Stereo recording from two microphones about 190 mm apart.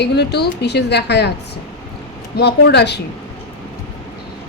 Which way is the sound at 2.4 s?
60° left (ahead or behind).